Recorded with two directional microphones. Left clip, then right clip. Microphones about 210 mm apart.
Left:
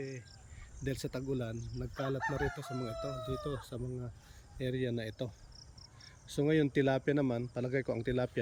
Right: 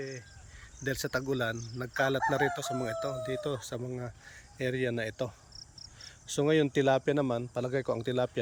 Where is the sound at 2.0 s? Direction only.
30° right (ahead or behind).